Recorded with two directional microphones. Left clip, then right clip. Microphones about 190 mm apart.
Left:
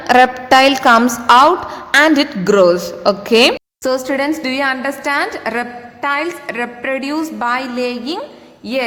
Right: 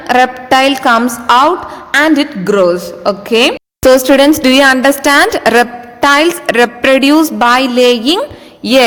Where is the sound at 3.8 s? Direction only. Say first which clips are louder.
Right 11 dB; 45° right (ahead or behind).